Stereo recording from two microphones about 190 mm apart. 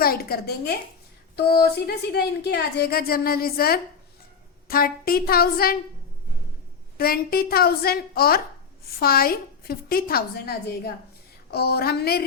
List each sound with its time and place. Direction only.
0.0 s a woman's voice: 55° left (ahead or behind)
6.9 s a woman's voice: 50° left (ahead or behind)